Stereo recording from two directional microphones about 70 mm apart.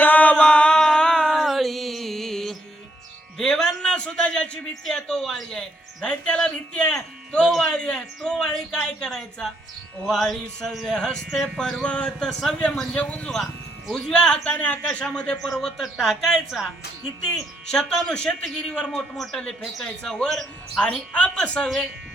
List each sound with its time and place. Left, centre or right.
0.0 s a sound: left; by 2.6 s centre
3.3 s music: centre
4.9 s speech: centre
13.4 s speech: centre
15.4 s speech: centre
17.7 s speech: centre